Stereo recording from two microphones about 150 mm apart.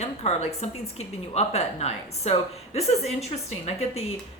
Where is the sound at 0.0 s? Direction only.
45° left (ahead or behind).